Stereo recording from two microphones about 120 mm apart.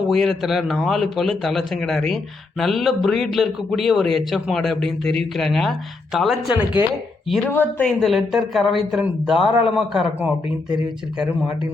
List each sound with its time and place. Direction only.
0.1 s speech: centre (ahead or behind)
7.4 s speech: 15° left (ahead or behind)
7.9 s speech: centre (ahead or behind)